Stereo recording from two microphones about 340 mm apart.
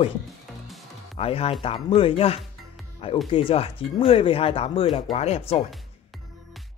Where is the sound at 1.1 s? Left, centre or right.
Centre.